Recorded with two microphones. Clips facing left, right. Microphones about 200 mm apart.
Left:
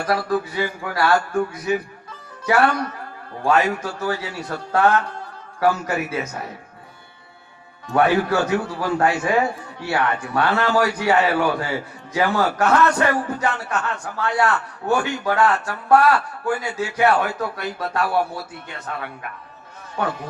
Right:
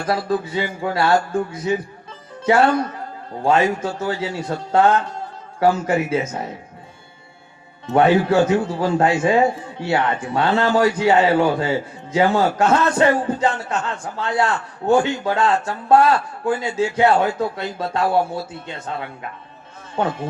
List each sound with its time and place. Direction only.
0.0 s a man's voice: 25° right (ahead or behind)
7.9 s a man's voice: 25° right (ahead or behind)